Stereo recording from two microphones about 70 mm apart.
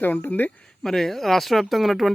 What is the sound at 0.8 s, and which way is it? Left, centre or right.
Speech, centre.